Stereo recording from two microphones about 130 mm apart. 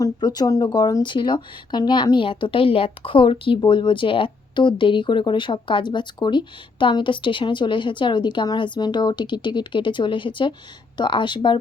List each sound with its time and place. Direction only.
0.0 s speech: 35° left (ahead or behind)